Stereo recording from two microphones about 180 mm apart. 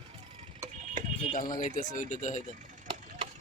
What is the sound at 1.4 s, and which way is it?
Speech, 45° left (ahead or behind).